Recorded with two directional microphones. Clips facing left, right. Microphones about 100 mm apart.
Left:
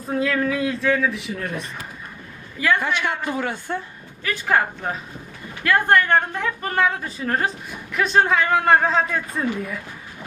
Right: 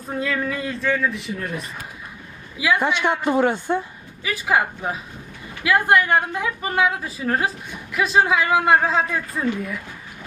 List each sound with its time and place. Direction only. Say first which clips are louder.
0.0 s a woman's voice: left 3 dB; centre (ahead or behind)
2.8 s speech: right 4 dB; 20° right (ahead or behind)
4.2 s a woman's voice: even; 5° right (ahead or behind)